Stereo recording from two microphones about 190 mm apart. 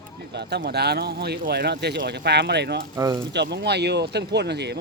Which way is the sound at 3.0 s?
15° right (ahead or behind).